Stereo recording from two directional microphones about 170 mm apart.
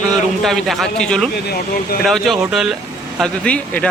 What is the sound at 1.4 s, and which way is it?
Speech, 60° left (ahead or behind).